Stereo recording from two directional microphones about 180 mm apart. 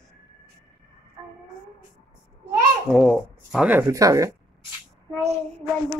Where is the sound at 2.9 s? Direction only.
Centre (ahead or behind).